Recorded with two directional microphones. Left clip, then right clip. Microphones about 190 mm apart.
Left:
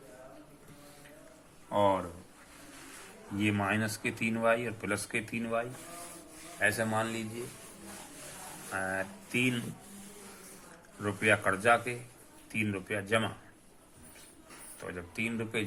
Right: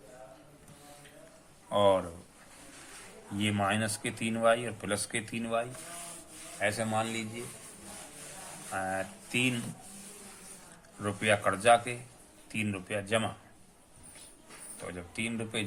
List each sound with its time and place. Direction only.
1.7 s speech: 40° right (ahead or behind)
3.3 s speech: 30° right (ahead or behind)
6.6 s a man's voice: 10° right (ahead or behind)
8.7 s speech: 20° right (ahead or behind)
11.0 s speech: 25° right (ahead or behind)
14.8 s speech: 25° right (ahead or behind)